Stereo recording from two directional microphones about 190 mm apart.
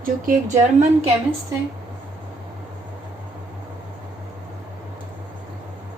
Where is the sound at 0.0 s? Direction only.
45° right (ahead or behind).